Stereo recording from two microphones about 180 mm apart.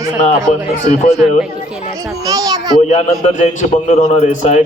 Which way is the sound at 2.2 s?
20° right (ahead or behind).